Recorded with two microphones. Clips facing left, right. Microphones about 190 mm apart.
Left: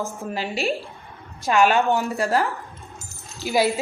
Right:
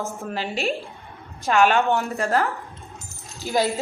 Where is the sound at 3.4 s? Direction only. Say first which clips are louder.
Left 2 dB; 15° left (ahead or behind).